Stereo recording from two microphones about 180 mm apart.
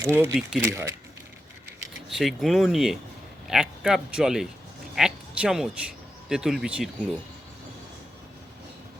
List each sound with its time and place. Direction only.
0.0 s speech: 15° right (ahead or behind)
2.0 s a man's voice: centre (ahead or behind)
4.9 s a sound: 5° right (ahead or behind)
6.2 s a man's voice: 5° right (ahead or behind)